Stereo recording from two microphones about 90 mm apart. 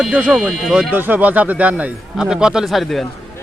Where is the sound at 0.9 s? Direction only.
20° right (ahead or behind); by 3.0 s centre (ahead or behind).